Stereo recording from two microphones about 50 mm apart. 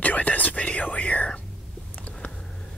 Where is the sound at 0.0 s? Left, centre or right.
Left.